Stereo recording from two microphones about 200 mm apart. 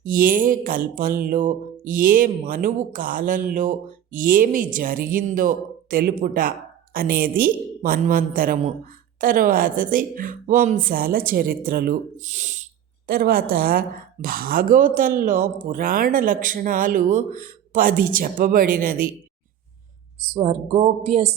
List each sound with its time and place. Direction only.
0.0 s a woman's voice: 45° right (ahead or behind)
13.1 s a woman's voice: 50° right (ahead or behind)
20.1 s speech: 30° right (ahead or behind)